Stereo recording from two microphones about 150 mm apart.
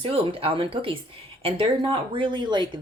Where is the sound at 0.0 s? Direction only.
40° right (ahead or behind).